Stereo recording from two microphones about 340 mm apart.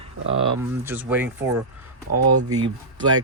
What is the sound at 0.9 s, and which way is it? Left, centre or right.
Speech, centre.